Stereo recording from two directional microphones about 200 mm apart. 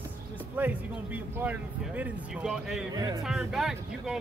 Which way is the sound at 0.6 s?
10° right (ahead or behind).